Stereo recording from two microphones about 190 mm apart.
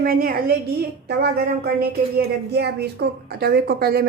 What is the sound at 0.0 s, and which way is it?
Speech, 50° right (ahead or behind).